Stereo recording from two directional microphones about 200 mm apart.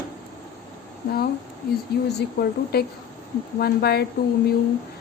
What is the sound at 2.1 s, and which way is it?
Speech, 55° left (ahead or behind).